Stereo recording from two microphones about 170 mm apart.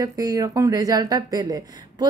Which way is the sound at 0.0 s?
20° right (ahead or behind).